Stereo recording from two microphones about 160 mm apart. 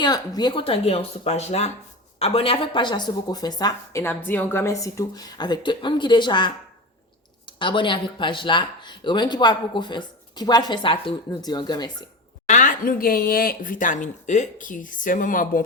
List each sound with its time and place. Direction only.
0.0 s speech: 25° left (ahead or behind)
4.0 s speech: 15° left (ahead or behind)
12.5 s speech: 55° left (ahead or behind)